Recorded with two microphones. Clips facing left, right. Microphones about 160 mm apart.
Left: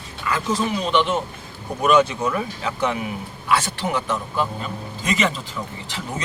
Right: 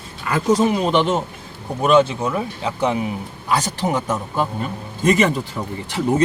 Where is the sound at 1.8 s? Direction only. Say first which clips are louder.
Right 2 dB; 30° right (ahead or behind).